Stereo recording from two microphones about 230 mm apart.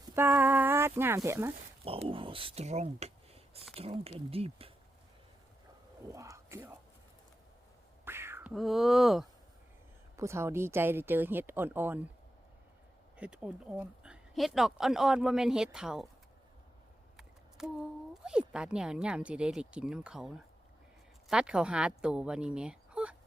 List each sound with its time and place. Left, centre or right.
0.2 s speech: centre
1.8 s speech: right
6.1 s speech: centre
8.0 s a sound: centre
10.2 s speech: centre
13.1 s speech: centre
17.2 s speech: centre